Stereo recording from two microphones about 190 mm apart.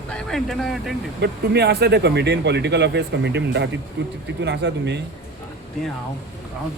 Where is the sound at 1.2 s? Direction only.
60° right (ahead or behind).